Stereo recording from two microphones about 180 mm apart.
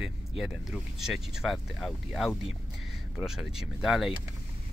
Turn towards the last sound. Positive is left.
turn(degrees=0)  # may be behind; listen again after turning